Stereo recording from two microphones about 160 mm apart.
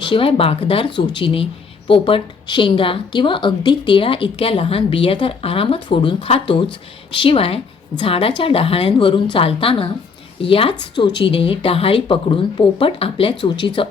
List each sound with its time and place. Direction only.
0.0 s a woman's voice: 35° left (ahead or behind)